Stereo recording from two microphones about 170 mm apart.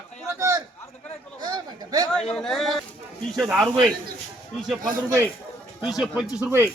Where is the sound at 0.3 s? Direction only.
20° right (ahead or behind).